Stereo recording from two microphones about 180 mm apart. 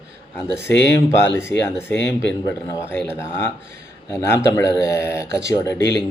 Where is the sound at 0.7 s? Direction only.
75° left (ahead or behind).